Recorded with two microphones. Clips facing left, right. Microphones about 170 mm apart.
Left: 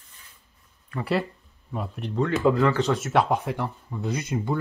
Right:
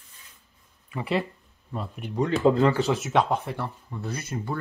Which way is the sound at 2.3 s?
25° right (ahead or behind).